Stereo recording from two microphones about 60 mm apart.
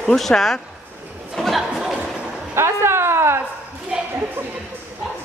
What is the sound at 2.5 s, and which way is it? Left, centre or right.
Speech, right.